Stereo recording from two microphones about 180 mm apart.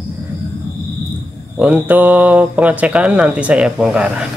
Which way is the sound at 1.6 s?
10° right (ahead or behind).